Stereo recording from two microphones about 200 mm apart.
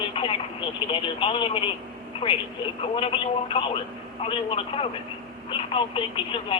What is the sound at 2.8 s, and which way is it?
A man's voice, 25° left (ahead or behind).